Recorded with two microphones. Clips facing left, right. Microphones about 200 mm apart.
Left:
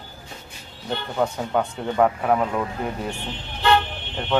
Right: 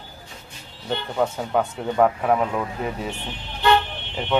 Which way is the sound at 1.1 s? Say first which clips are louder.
Even; 5° right (ahead or behind).